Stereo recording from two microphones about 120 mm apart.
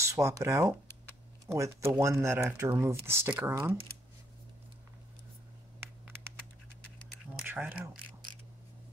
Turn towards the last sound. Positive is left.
turn(degrees=-10)  # may be behind; listen again after turning